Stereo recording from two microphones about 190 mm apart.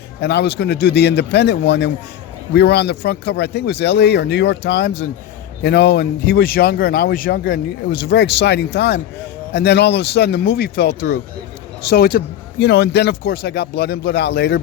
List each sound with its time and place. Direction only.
0.2 s a man's voice: 65° left (ahead or behind)
8.0 s a man's voice: 65° left (ahead or behind)